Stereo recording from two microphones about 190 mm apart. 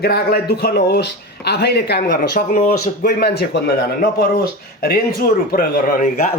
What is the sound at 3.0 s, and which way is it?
Speech, 55° left (ahead or behind).